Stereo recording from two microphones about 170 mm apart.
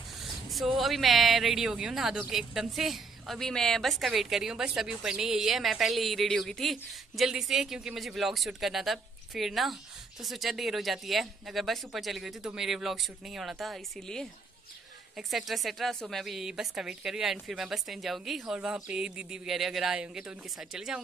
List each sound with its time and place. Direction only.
0.2 s speech: centre (ahead or behind)